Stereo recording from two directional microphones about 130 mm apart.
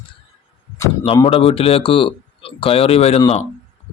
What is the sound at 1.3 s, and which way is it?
Speech, 45° left (ahead or behind).